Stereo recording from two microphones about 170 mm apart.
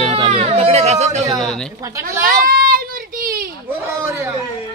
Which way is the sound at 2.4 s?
60° right (ahead or behind).